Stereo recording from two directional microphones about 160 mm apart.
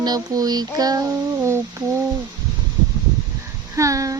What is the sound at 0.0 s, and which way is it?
Child singing, 25° right (ahead or behind).